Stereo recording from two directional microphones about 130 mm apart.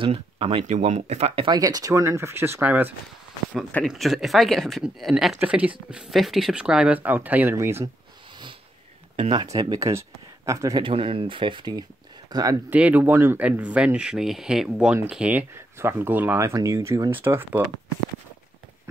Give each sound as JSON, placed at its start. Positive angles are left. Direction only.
{"t": 0.0, "sound": "speech", "side_deg": -45}
{"t": 0.7, "sound": "speech", "side_deg": -65}
{"t": 1.6, "sound": "speech", "side_deg": -25}
{"t": 3.8, "sound": "speech", "side_deg": 0}
{"t": 9.1, "sound": "speech", "side_deg": -40}
{"t": 10.8, "sound": "speech", "side_deg": -45}
{"t": 12.6, "sound": "speech", "side_deg": -10}